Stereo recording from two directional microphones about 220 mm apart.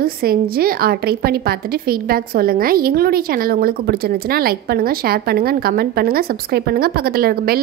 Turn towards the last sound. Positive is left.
turn(degrees=-45)  # may be behind; listen again after turning